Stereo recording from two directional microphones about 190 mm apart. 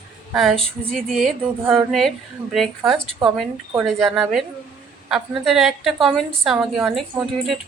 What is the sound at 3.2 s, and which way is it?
A woman's voice, centre (ahead or behind).